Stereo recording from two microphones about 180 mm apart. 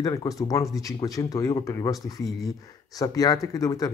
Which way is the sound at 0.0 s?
20° left (ahead or behind).